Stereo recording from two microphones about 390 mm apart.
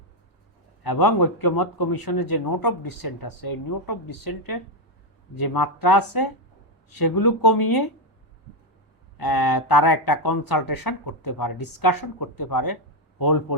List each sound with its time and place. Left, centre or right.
0.9 s speech: left
9.1 s a man's voice: left